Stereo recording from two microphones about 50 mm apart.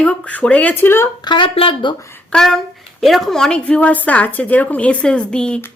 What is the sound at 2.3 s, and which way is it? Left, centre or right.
Speech, centre.